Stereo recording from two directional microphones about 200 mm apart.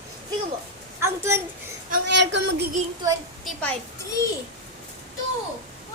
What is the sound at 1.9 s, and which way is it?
Speech, 60° right (ahead or behind).